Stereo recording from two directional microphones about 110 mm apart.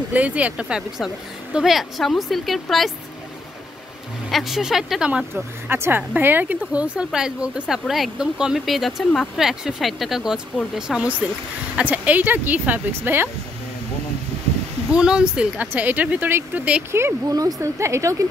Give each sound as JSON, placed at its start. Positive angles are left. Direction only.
{"t": 0.1, "sound": "speech", "side_deg": -10}
{"t": 4.3, "sound": "speech", "side_deg": 0}
{"t": 5.3, "sound": "speech", "side_deg": -20}
{"t": 14.9, "sound": "speech", "side_deg": -10}
{"t": 17.3, "sound": "a woman's voice", "side_deg": -35}